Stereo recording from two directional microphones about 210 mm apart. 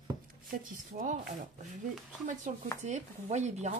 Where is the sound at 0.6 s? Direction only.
40° right (ahead or behind).